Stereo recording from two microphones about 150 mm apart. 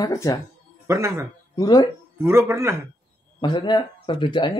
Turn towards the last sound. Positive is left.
turn(degrees=30)  # may be behind; listen again after turning